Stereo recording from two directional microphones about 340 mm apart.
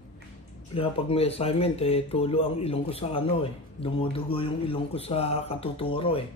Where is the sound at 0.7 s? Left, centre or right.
Centre.